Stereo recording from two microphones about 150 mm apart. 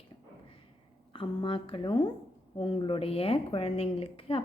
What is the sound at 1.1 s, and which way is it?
Speech, 35° left (ahead or behind).